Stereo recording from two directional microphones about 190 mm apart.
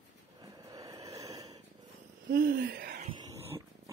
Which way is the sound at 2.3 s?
55° right (ahead or behind).